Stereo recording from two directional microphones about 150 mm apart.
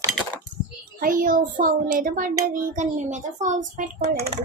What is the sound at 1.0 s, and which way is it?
Speech, 65° right (ahead or behind).